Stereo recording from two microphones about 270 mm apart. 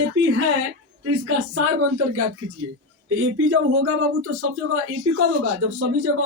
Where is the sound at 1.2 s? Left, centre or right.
Right.